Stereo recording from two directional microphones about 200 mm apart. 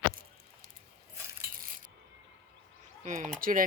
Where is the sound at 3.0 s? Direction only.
40° right (ahead or behind).